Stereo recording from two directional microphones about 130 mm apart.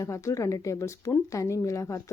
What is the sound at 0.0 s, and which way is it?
Speech, 25° left (ahead or behind).